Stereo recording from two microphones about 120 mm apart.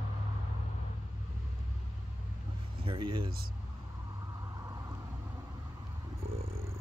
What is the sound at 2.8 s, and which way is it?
Speech, 45° right (ahead or behind).